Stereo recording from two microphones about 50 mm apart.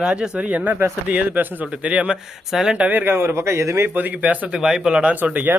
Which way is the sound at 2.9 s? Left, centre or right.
Right.